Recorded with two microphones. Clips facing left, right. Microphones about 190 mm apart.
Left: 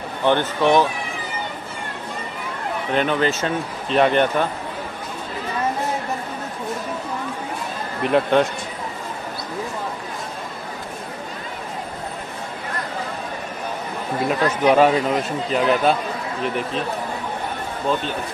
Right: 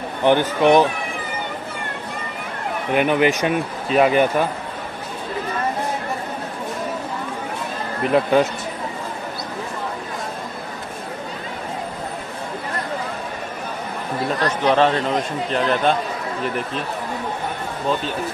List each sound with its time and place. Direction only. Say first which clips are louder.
0.2 s speech: right 2 dB; 15° right (ahead or behind)
2.9 s speech: right 3 dB; 10° right (ahead or behind)
8.0 s speech: right 1 dB; centre (ahead or behind)
14.4 s speech: left 2 dB; 10° left (ahead or behind)